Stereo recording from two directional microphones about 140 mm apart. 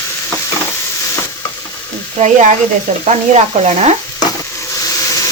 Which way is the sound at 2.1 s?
60° right (ahead or behind).